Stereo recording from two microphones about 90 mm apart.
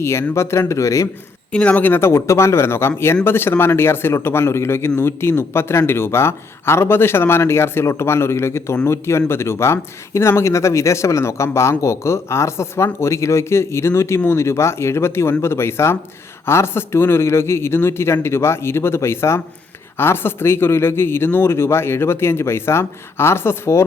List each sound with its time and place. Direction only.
0.0 s speech: 30° left (ahead or behind)
1.5 s speech: 15° left (ahead or behind)